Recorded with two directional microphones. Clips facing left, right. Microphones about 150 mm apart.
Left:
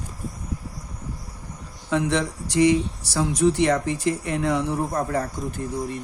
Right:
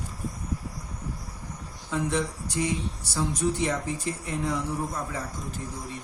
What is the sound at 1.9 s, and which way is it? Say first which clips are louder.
Speech: left 5 dB; 80° left.